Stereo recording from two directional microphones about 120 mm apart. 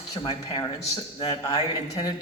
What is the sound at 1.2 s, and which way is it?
Speech, 35° left (ahead or behind).